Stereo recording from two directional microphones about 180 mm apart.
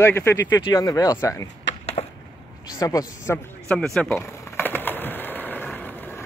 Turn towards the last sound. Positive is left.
turn(degrees=10)  # may be behind; listen again after turning